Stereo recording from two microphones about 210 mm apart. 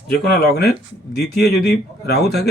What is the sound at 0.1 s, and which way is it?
Speech, 50° left (ahead or behind).